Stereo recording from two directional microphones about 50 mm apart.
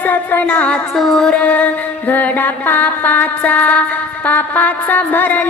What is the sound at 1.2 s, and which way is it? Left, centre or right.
Music, left.